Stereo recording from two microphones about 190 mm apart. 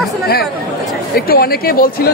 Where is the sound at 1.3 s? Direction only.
55° left (ahead or behind).